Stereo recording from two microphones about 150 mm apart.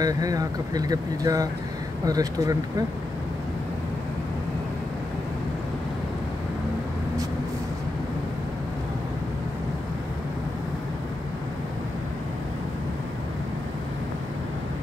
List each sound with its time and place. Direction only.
0.0 s speech: 25° right (ahead or behind)